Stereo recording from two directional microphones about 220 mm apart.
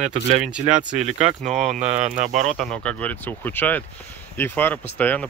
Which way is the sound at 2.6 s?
5° left (ahead or behind).